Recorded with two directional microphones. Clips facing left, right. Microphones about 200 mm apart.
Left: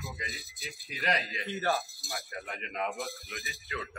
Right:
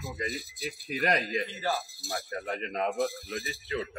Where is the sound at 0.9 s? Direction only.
45° right (ahead or behind).